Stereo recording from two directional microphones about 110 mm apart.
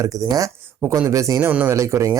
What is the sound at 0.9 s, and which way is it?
Music, 30° right (ahead or behind).